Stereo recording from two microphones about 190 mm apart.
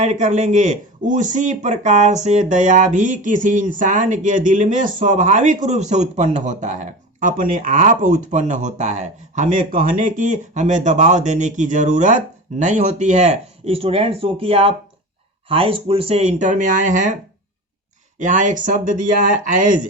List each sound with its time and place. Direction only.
0.0 s speech: 35° right (ahead or behind)
18.2 s speech: 40° right (ahead or behind)